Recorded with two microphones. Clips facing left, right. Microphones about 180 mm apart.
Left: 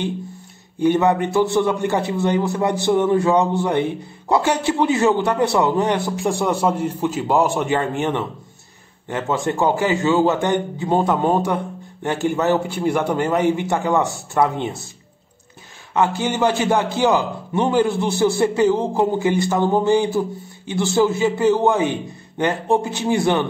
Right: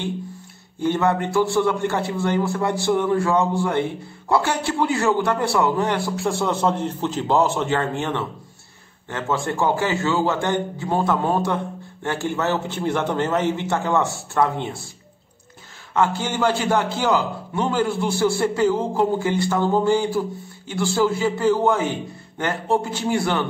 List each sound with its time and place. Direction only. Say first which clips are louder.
0.7 s a man's voice: left 4 dB; 15° left (ahead or behind)
15.9 s a man's voice: left 2 dB; 15° left (ahead or behind)